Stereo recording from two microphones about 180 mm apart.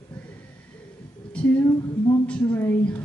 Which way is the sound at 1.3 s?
5° left (ahead or behind).